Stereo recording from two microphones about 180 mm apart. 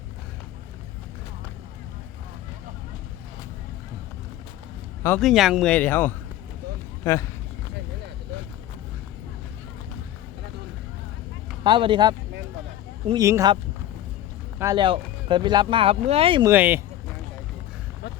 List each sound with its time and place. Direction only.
5.2 s speech: centre (ahead or behind); by 7.3 s 15° left (ahead or behind)
11.6 s speech: 25° right (ahead or behind)
14.6 s speech: 25° right (ahead or behind)
16.5 s speech: 10° right (ahead or behind)